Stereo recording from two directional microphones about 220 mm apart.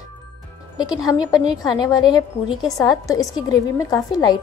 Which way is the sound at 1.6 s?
15° left (ahead or behind).